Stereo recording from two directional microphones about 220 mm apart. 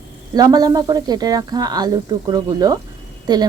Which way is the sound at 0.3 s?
15° right (ahead or behind).